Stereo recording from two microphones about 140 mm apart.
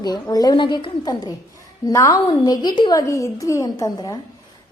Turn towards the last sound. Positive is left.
turn(degrees=25)  # may be behind; listen again after turning